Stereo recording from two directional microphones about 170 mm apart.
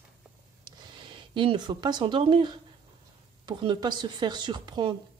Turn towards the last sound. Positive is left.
turn(degrees=-25)  # may be behind; listen again after turning